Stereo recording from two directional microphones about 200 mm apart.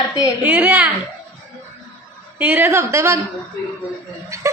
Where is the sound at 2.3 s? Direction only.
10° right (ahead or behind).